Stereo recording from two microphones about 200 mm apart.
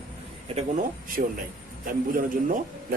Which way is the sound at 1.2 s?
50° right (ahead or behind).